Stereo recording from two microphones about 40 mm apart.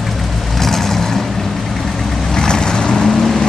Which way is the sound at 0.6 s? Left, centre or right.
Centre.